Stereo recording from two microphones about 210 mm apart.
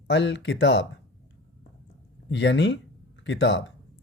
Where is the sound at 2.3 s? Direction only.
55° left (ahead or behind).